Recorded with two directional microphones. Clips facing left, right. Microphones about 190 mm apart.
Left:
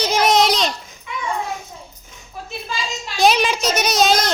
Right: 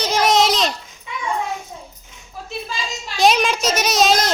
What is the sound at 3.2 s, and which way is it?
A child's voice, centre (ahead or behind).